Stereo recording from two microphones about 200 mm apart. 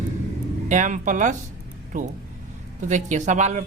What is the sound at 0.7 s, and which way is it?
Speech, 40° right (ahead or behind).